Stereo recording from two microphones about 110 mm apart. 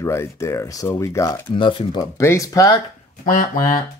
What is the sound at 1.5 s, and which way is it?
Speech, 45° left (ahead or behind).